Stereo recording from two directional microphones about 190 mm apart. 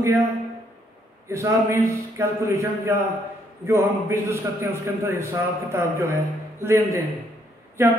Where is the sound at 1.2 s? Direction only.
15° right (ahead or behind).